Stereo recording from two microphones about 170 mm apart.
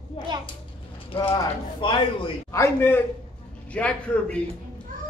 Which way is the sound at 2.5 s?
15° left (ahead or behind).